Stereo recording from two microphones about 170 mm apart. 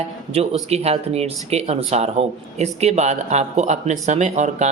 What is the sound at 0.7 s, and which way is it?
Speech, 40° right (ahead or behind).